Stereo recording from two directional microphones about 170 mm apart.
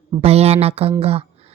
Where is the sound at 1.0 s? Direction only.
35° right (ahead or behind).